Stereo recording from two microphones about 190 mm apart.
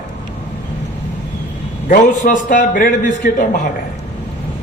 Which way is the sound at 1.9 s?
45° left (ahead or behind).